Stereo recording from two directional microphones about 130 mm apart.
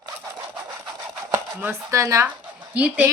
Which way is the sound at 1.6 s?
20° right (ahead or behind).